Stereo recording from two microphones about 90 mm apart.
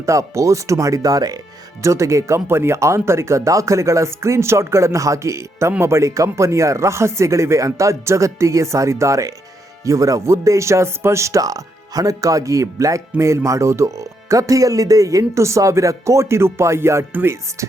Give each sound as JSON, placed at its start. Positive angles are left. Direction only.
{"t": 0.0, "sound": "speech", "side_deg": -35}